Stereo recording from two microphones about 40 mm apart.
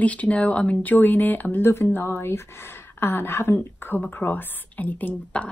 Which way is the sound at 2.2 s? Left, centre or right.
Left.